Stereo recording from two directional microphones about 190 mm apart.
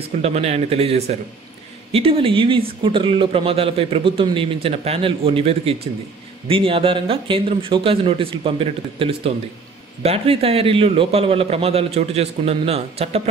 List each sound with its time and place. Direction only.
0.2 s a man's voice: 35° right (ahead or behind)